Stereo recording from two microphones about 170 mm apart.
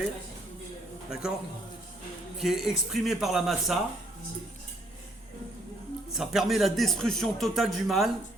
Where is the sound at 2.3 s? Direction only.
Centre (ahead or behind).